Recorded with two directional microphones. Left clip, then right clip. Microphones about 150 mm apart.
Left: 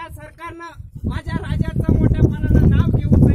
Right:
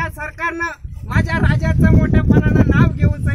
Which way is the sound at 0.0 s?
5° right (ahead or behind).